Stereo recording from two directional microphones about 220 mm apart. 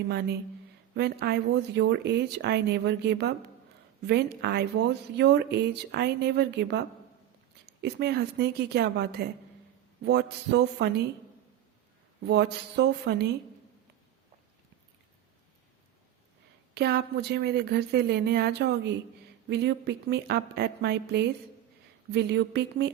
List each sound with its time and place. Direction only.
0.9 s a woman's voice: 50° right (ahead or behind)
12.2 s a woman's voice: 50° right (ahead or behind)
16.7 s a woman's voice: 50° right (ahead or behind)